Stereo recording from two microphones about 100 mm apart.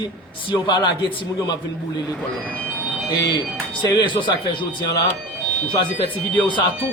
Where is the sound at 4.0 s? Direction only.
50° left (ahead or behind).